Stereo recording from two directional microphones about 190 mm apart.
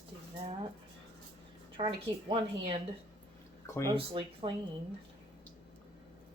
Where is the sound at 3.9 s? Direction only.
30° right (ahead or behind).